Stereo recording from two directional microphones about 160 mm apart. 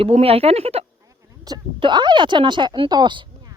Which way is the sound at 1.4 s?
25° right (ahead or behind).